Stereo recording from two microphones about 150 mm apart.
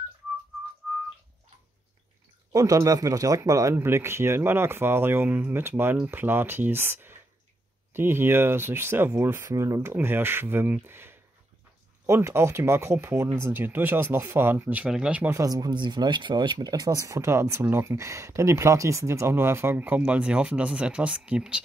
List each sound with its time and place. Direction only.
0.8 s whistling: 5° right (ahead or behind)
2.5 s speech: 25° right (ahead or behind)
15.3 s speech: 25° right (ahead or behind); by 21.5 s 5° right (ahead or behind)